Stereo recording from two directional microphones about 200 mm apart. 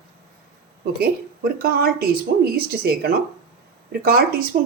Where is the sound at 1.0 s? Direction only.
50° right (ahead or behind).